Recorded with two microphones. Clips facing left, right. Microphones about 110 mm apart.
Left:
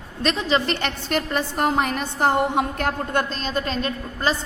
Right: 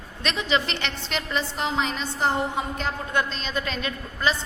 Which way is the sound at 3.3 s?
40° left (ahead or behind).